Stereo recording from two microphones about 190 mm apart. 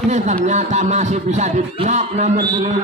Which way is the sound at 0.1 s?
35° right (ahead or behind).